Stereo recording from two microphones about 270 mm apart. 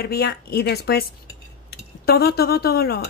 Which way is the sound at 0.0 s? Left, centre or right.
Left.